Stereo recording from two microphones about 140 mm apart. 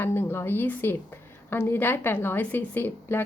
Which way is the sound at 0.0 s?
15° left (ahead or behind).